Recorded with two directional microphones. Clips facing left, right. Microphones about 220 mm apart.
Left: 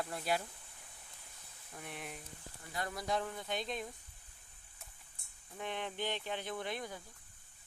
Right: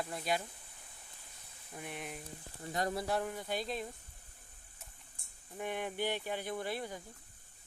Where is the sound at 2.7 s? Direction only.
40° right (ahead or behind).